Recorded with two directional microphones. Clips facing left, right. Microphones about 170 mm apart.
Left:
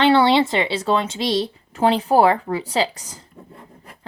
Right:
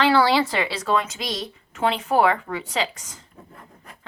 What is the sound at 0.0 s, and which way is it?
Speech, 25° left (ahead or behind).